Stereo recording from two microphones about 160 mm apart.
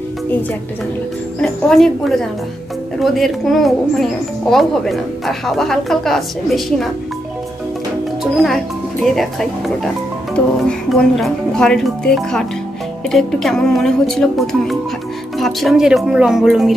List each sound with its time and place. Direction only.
1.4 s a woman's voice: centre (ahead or behind)
8.2 s a woman's voice: centre (ahead or behind)
10.7 s a woman's voice: 5° left (ahead or behind)